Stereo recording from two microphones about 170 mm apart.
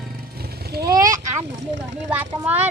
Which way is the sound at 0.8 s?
20° right (ahead or behind).